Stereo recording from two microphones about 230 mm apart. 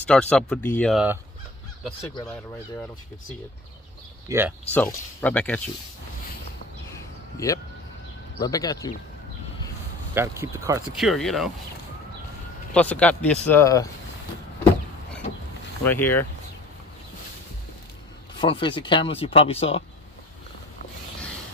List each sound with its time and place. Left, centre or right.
0.0 s speech: centre
2.2 s speech: centre
4.3 s speech: centre
4.7 s speech: centre
6.9 s a sound: centre
8.4 s speech: centre
10.1 s speech: centre
11.0 s speech: centre
12.7 s speech: centre
15.8 s speech: centre
18.4 s speech: left